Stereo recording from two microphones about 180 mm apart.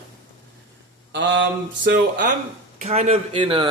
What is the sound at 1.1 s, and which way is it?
Mantra, 90° right.